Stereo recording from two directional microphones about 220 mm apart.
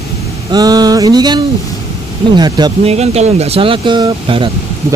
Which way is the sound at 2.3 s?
20° right (ahead or behind).